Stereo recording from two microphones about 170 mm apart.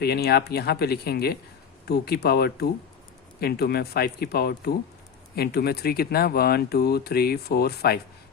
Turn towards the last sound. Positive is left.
turn(degrees=65)  # may be behind; listen again after turning